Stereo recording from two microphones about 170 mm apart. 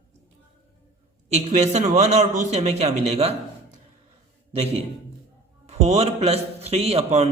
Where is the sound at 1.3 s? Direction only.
40° right (ahead or behind).